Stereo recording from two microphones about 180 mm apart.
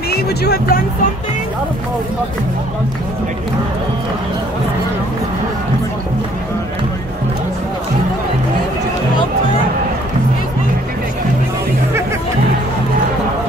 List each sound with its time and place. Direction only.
0.1 s music: 60° left (ahead or behind)